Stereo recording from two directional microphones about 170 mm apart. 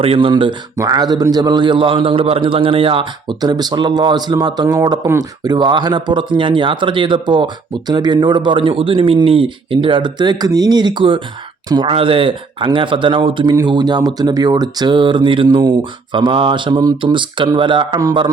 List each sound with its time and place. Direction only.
0.0 s a man's voice: 30° right (ahead or behind)